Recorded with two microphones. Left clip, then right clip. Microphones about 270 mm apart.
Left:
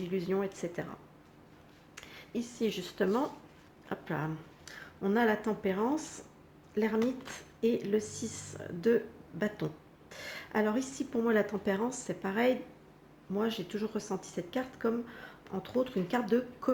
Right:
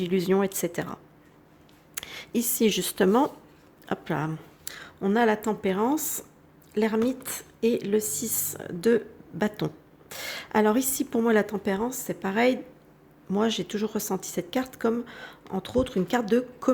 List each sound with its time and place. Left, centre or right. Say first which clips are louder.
0.0 s speech: right 9 dB; right
2.0 s a woman's voice: right 9 dB; right
13.3 s a woman's voice: right 7 dB; right